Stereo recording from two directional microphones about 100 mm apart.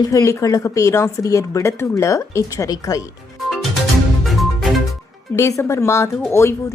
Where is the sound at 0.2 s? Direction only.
30° left (ahead or behind).